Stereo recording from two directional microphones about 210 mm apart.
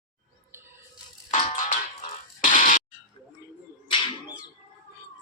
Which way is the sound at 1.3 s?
35° left (ahead or behind).